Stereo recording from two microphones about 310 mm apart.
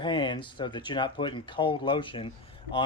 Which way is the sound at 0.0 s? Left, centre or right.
Centre.